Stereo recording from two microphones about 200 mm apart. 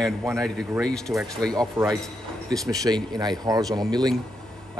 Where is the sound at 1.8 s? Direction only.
10° right (ahead or behind).